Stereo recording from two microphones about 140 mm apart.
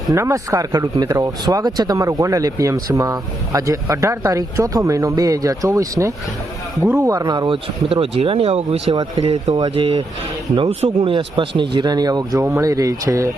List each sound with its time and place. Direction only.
0.1 s speech: 25° right (ahead or behind)